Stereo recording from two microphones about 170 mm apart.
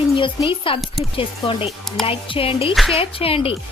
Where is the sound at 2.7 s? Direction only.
Centre (ahead or behind).